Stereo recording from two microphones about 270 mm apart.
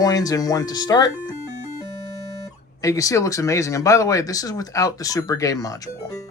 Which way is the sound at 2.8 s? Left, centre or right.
Centre.